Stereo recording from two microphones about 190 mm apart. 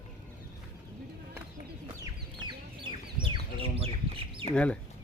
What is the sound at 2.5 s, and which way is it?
Chicken, 25° right (ahead or behind).